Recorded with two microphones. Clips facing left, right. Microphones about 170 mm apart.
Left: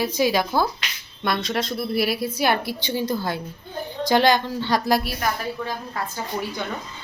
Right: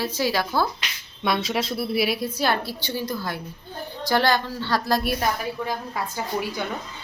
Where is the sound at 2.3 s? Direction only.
15° left (ahead or behind).